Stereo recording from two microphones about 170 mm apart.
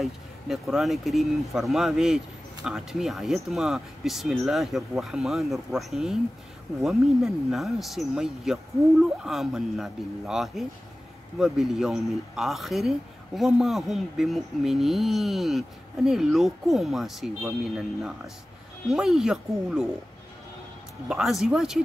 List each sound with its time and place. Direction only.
0.0 s speech: centre (ahead or behind)
21.1 s speech: centre (ahead or behind)